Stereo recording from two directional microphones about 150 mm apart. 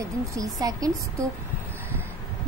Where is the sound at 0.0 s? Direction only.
20° right (ahead or behind).